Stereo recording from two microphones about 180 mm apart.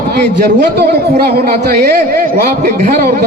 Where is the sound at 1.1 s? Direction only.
60° right (ahead or behind).